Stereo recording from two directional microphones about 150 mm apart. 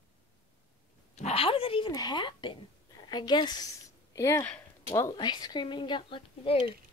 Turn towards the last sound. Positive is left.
turn(degrees=35)  # may be behind; listen again after turning